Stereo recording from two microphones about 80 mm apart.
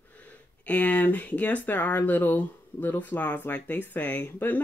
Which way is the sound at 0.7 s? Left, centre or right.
Centre.